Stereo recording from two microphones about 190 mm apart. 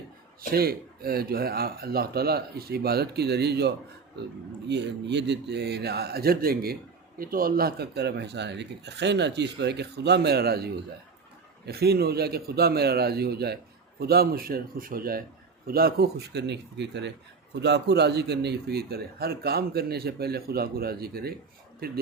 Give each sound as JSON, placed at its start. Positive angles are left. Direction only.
{"t": 0.5, "sound": "a man's voice", "side_deg": -55}
{"t": 4.7, "sound": "a man's voice", "side_deg": -65}